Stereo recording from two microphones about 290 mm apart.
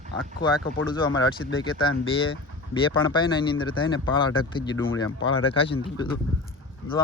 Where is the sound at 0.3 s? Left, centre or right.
Left.